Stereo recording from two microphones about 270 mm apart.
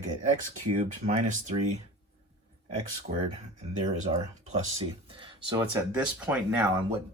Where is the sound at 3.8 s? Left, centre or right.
Centre.